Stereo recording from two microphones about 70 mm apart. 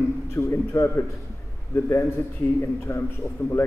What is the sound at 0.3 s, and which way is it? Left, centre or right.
Speech, left.